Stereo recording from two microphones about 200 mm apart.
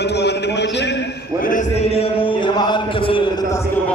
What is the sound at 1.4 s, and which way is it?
Speech, 40° left (ahead or behind).